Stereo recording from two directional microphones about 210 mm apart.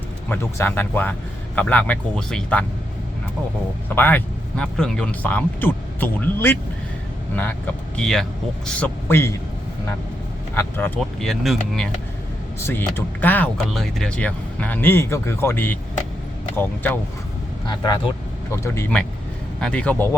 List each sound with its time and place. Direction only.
0.3 s speech: 10° left (ahead or behind)
3.8 s speech: 10° left (ahead or behind)
7.9 s a man's voice: centre (ahead or behind)
10.5 s a man's voice: 10° left (ahead or behind)
17.7 s a man's voice: 20° left (ahead or behind)